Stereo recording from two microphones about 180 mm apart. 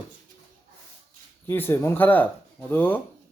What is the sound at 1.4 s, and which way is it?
Speech, 10° left (ahead or behind).